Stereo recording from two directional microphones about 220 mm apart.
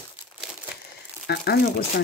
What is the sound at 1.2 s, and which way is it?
Speech, 45° left (ahead or behind).